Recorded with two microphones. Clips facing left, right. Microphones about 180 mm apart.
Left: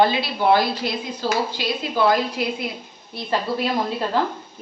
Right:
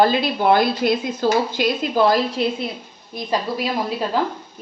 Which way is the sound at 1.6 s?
40° right (ahead or behind).